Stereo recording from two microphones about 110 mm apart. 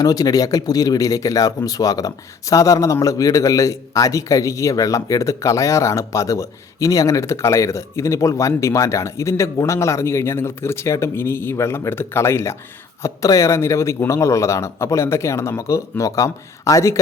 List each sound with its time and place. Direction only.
0.0 s speech: 35° left (ahead or behind)